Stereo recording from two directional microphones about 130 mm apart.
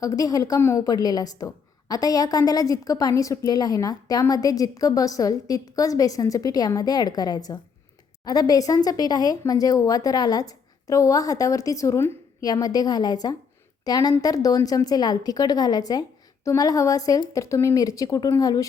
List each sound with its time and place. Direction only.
0.0 s a woman's voice: 30° left (ahead or behind)